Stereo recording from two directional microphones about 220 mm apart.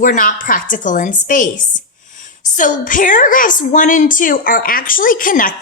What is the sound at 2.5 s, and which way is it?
A woman's voice, 35° left (ahead or behind).